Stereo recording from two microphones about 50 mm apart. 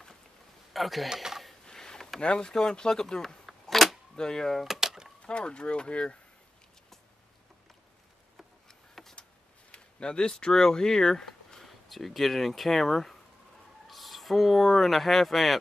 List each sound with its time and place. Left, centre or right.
0.7 s speech: centre
1.1 s a sound: centre
1.7 s a sound: centre
2.2 s speech: centre
4.2 s speech: centre
4.6 s door: centre
5.2 s speech: centre
8.6 s vehicle: centre
9.7 s speech: centre